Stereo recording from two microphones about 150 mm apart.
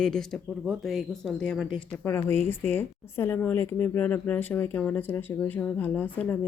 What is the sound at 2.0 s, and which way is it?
Speech, 15° left (ahead or behind).